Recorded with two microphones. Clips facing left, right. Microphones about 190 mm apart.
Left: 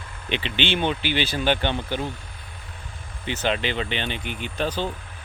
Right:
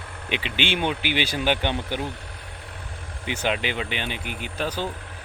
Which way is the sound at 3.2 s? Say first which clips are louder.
Left 1 dB; 10° right (ahead or behind).